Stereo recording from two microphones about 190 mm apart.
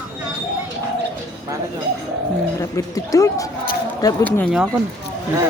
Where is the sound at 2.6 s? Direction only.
15° left (ahead or behind).